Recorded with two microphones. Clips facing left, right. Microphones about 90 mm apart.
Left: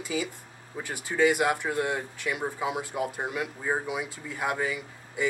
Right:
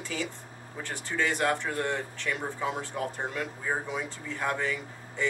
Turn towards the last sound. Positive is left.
turn(degrees=10)  # may be behind; listen again after turning